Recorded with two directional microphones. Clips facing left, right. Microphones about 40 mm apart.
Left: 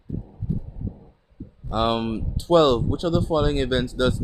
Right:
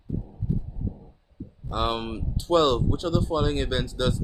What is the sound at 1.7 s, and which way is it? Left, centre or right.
Speech, left.